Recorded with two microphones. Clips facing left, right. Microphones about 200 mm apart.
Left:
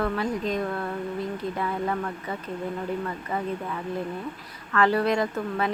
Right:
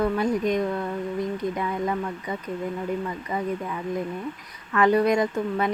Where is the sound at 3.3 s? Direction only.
15° right (ahead or behind).